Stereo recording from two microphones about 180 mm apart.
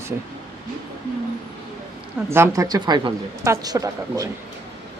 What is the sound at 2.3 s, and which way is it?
Speech, 15° right (ahead or behind).